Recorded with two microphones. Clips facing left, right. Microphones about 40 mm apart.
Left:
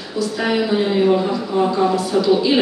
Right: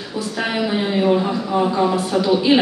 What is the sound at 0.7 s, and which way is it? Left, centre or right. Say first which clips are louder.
Speech: left 1 dB; centre.